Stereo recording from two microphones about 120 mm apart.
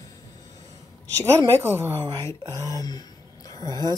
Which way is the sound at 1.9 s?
20° left (ahead or behind).